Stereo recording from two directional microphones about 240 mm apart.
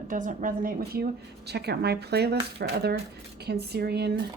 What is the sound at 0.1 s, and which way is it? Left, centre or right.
A woman's voice, right.